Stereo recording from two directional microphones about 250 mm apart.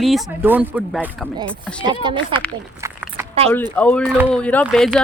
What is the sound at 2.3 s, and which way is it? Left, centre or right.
Speech, centre.